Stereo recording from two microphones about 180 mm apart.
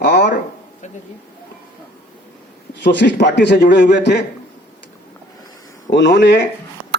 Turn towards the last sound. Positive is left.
turn(degrees=75)  # may be behind; listen again after turning